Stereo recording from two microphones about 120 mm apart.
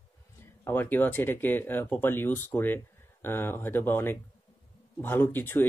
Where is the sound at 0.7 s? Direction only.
15° left (ahead or behind).